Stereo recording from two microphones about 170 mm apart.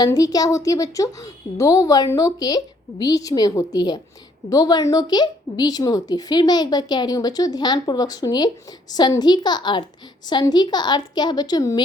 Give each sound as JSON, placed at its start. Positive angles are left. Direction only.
{"t": 0.0, "sound": "a woman's voice", "side_deg": 20}